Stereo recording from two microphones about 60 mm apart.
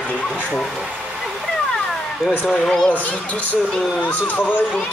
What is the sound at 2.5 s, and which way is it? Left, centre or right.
Speech, centre.